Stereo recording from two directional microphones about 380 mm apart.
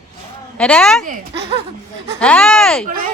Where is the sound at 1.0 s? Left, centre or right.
Right.